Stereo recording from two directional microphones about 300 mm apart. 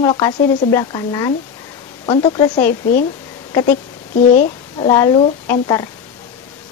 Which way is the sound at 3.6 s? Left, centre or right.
Left.